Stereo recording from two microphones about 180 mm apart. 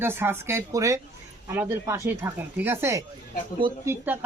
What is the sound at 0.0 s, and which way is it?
Speech, 10° right (ahead or behind).